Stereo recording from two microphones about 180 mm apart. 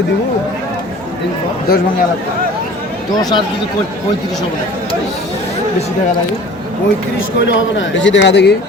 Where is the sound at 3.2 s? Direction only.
20° left (ahead or behind).